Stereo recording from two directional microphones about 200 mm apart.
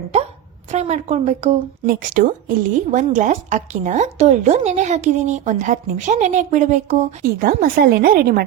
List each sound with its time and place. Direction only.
0.7 s a woman's voice: 35° right (ahead or behind); by 8.4 s 50° right (ahead or behind)